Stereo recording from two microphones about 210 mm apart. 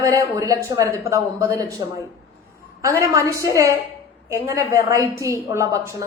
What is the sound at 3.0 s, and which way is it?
A man's voice, 15° right (ahead or behind).